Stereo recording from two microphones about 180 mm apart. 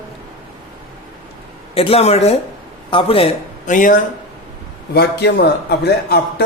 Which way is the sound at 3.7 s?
45° left (ahead or behind).